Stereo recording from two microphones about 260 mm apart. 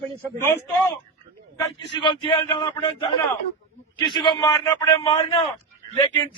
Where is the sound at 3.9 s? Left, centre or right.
Centre.